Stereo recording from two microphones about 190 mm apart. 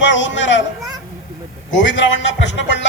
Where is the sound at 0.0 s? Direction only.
70° left (ahead or behind).